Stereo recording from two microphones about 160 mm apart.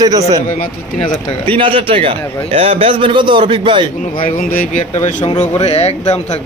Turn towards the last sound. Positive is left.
turn(degrees=45)  # may be behind; listen again after turning